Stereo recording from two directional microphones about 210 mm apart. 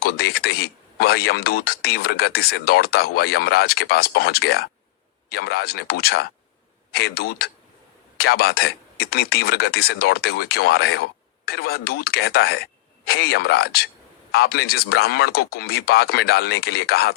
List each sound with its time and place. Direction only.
0.0 s speech: 45° left (ahead or behind)